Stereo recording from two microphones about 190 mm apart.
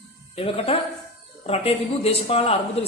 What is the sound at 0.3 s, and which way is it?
Speech, 30° left (ahead or behind).